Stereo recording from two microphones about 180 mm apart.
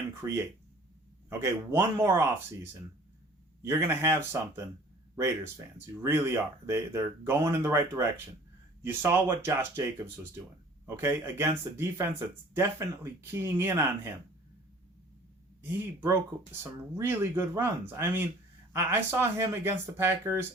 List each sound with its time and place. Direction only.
0.2 s speech: 20° right (ahead or behind)
3.6 s speech: 15° right (ahead or behind)
15.6 s speech: 10° right (ahead or behind)